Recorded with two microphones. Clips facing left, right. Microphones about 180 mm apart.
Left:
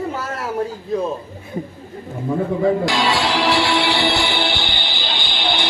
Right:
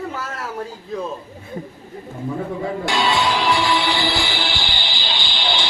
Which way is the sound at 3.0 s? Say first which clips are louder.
Left 1 dB; 90° left.